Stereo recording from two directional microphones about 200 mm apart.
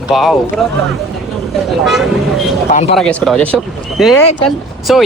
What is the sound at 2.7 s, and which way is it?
Speech, 35° left (ahead or behind).